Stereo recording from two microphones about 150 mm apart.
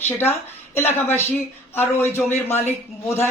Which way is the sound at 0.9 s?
15° left (ahead or behind).